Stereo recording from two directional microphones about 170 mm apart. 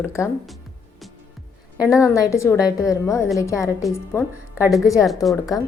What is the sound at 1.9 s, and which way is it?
A woman's voice, 20° left (ahead or behind).